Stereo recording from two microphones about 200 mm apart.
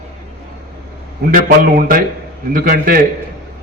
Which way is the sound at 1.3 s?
45° right (ahead or behind).